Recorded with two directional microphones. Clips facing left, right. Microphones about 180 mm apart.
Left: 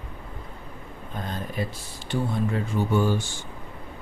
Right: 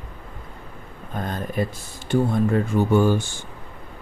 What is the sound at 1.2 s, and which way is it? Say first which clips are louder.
Speech: right 5 dB; 50° right (ahead or behind).